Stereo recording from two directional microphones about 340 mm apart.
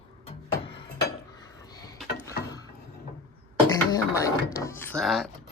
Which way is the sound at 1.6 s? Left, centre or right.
Centre.